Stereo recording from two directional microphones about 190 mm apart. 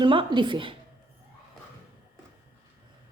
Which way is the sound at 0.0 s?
25° right (ahead or behind).